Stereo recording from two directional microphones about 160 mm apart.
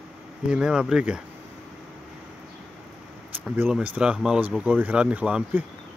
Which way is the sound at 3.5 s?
10° right (ahead or behind).